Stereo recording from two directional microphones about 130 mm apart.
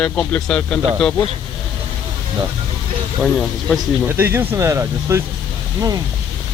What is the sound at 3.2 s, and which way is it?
Speech, centre (ahead or behind).